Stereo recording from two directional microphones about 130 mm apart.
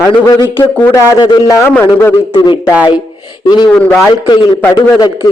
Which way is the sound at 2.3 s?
40° left (ahead or behind).